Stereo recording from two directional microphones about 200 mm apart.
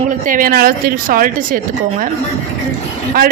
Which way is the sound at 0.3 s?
45° right (ahead or behind).